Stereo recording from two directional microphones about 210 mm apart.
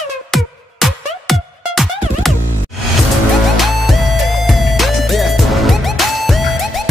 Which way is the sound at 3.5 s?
Centre (ahead or behind).